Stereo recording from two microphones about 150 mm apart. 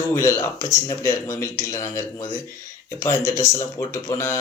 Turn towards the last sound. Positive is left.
turn(degrees=20)  # may be behind; listen again after turning